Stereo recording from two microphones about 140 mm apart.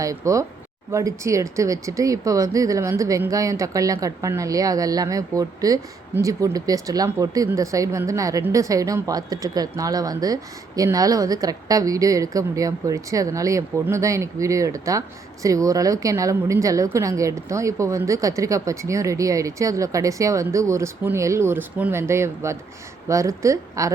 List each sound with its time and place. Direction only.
0.0 s speech: 25° right (ahead or behind)